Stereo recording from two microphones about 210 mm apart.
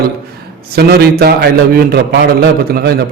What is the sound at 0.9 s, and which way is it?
A man's voice, 45° right (ahead or behind).